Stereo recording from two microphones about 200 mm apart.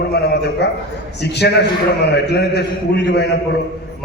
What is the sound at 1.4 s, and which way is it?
A man's voice, 55° left (ahead or behind).